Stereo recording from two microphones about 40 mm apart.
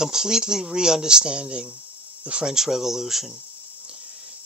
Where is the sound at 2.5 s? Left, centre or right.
Centre.